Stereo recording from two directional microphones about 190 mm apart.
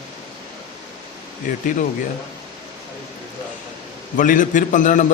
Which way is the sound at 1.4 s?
45° left (ahead or behind).